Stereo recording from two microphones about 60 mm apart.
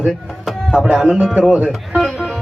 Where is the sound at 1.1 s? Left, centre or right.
Centre.